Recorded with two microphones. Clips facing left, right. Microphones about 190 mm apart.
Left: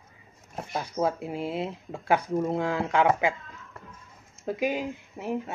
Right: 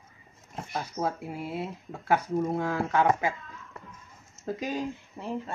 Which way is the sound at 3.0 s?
90° left.